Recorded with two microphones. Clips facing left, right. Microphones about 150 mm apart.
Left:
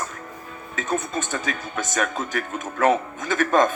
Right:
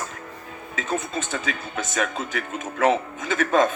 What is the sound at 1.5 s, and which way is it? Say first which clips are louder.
A man's voice: left 1 dB; 45° left (ahead or behind).